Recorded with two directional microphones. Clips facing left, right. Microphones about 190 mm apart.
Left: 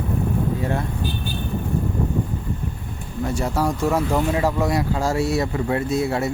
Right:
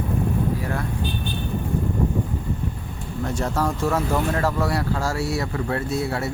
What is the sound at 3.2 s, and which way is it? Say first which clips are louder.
Speech: left 2 dB; 10° left (ahead or behind).